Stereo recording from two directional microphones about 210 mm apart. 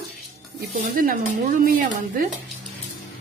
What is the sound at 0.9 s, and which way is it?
Speech, 40° right (ahead or behind).